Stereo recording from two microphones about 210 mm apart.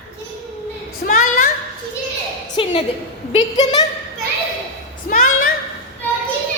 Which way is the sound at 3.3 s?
20° left (ahead or behind).